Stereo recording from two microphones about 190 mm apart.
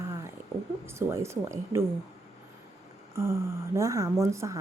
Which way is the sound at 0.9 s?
15° right (ahead or behind).